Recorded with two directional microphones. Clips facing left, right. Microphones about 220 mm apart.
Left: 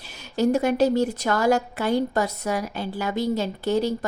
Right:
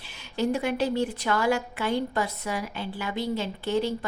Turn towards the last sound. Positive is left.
turn(degrees=40)  # may be behind; listen again after turning